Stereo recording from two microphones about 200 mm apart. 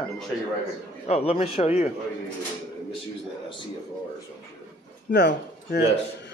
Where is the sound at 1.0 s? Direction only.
30° left (ahead or behind).